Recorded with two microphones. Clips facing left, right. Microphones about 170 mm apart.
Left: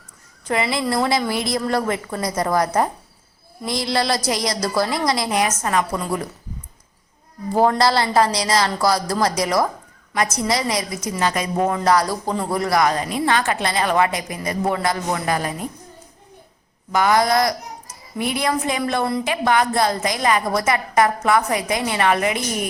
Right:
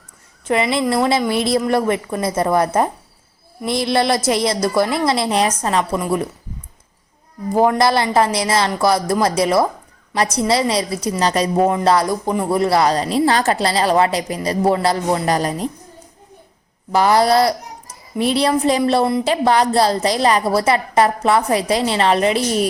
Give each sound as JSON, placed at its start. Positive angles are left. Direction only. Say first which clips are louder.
{"t": 0.4, "sound": "a woman's voice", "louder": "right 4 dB", "side_deg": -25}
{"t": 7.5, "sound": "a woman's voice", "louder": "right 2 dB", "side_deg": -15}
{"t": 16.9, "sound": "a woman's voice", "louder": "right 3 dB", "side_deg": -35}